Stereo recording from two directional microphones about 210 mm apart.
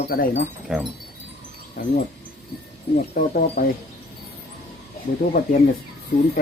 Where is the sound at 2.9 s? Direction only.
40° left (ahead or behind).